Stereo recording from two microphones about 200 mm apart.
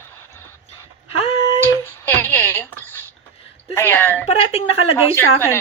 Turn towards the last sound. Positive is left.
turn(degrees=10)  # may be behind; listen again after turning